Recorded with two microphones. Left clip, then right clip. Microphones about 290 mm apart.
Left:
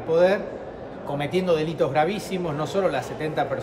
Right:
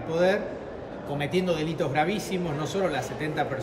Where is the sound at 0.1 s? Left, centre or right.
Centre.